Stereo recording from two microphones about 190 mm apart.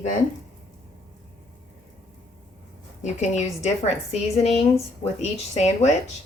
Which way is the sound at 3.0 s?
40° left (ahead or behind).